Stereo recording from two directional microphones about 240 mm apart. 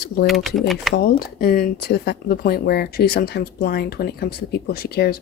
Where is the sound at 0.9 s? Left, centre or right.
Left.